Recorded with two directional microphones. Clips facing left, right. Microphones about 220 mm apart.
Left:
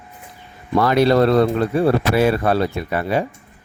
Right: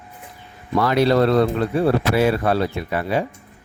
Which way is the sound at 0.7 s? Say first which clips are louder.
Left 2 dB; 50° left (ahead or behind).